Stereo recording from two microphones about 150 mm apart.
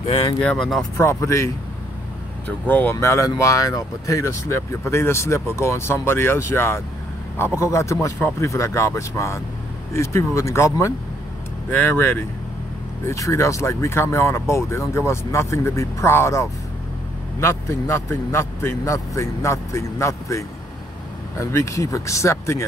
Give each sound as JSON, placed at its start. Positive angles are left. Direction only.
{"t": 0.4, "sound": "speech", "side_deg": 5}
{"t": 0.9, "sound": "speech", "side_deg": 20}